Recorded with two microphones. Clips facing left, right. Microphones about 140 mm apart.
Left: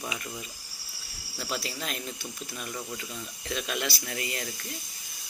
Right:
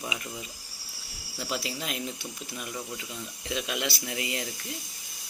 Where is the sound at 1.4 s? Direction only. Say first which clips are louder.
Right 1 dB; 15° right (ahead or behind).